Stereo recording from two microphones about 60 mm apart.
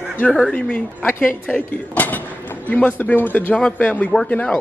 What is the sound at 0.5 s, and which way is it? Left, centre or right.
Speech, left.